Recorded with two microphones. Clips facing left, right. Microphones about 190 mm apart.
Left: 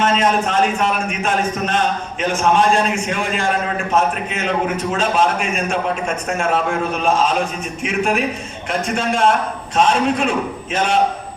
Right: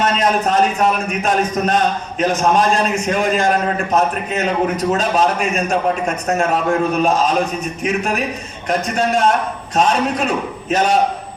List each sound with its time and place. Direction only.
0.0 s a man's voice: 40° right (ahead or behind)
9.7 s a man's voice: 40° right (ahead or behind)